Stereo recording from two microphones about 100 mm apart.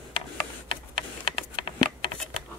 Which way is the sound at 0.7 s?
60° left (ahead or behind).